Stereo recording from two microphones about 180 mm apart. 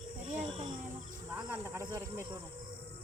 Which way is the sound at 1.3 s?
10° right (ahead or behind).